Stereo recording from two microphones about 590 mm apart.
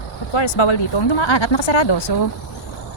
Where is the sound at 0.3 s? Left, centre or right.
Left.